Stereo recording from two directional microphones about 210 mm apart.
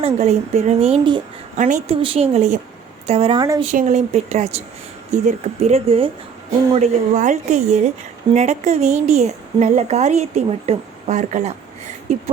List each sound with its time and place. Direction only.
0.0 s a woman's voice: 30° right (ahead or behind)
1.5 s a woman's voice: 35° right (ahead or behind); by 3.6 s 20° right (ahead or behind)
3.6 s a woman's voice: 35° right (ahead or behind)